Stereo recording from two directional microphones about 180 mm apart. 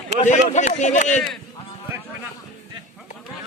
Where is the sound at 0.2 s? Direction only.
40° left (ahead or behind).